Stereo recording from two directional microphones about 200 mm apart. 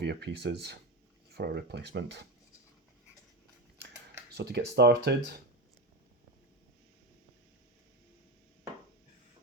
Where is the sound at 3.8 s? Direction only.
55° right (ahead or behind).